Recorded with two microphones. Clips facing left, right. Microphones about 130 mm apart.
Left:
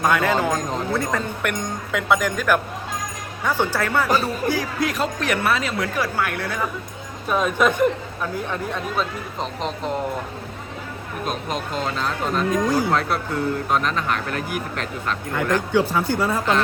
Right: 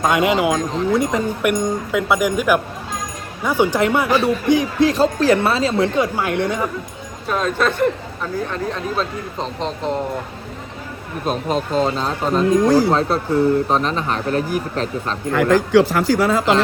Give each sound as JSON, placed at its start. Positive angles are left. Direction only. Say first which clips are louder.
{"t": 0.0, "sound": "speech", "louder": "right 3 dB", "side_deg": -20}
{"t": 7.3, "sound": "speech", "louder": "even", "side_deg": 10}
{"t": 11.3, "sound": "speech", "louder": "right 7 dB", "side_deg": -35}
{"t": 12.6, "sound": "speech", "louder": "right 7 dB", "side_deg": -90}
{"t": 12.9, "sound": "speech", "louder": "right 5 dB", "side_deg": -30}
{"t": 15.3, "sound": "speech", "louder": "right 7 dB", "side_deg": -90}